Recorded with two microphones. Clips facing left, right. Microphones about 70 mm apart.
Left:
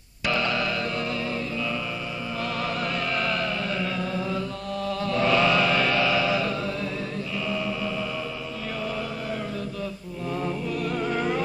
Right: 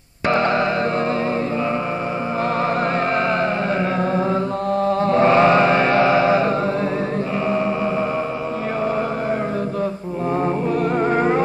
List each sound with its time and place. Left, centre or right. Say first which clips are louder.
0.3 s music: right 8 dB; right
4.0 s music: right 9 dB; right
4.8 s chant: right 8 dB; right
10.4 s music: right 8 dB; right